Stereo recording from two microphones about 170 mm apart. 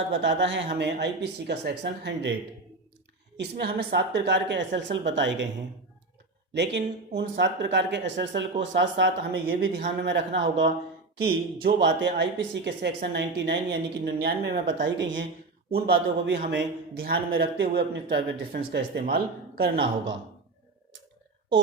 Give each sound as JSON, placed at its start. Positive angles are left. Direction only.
{"t": 0.1, "sound": "speech", "side_deg": -90}
{"t": 3.3, "sound": "a woman's voice", "side_deg": -75}
{"t": 6.5, "sound": "a woman's voice", "side_deg": -85}
{"t": 10.0, "sound": "a woman's voice", "side_deg": -90}
{"t": 11.2, "sound": "speech", "side_deg": -65}